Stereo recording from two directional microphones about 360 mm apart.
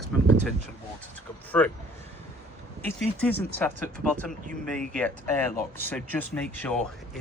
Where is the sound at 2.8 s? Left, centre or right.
Centre.